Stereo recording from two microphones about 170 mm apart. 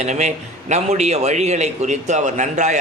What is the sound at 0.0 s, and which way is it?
A man's voice, 40° right (ahead or behind).